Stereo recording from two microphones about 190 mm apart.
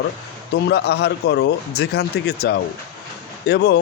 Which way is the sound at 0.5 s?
60° left (ahead or behind).